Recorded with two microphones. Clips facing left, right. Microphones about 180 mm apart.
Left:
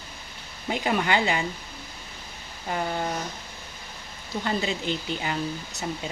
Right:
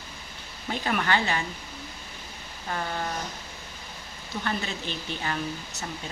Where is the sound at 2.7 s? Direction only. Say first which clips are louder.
Left 3 dB; 15° left (ahead or behind).